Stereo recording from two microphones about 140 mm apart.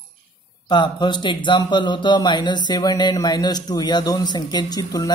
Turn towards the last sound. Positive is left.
turn(degrees=25)  # may be behind; listen again after turning